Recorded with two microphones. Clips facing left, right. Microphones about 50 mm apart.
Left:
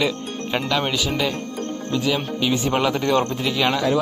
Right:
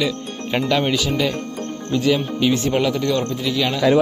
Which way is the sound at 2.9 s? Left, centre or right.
Left.